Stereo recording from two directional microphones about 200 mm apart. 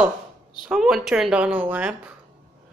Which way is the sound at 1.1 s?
5° right (ahead or behind).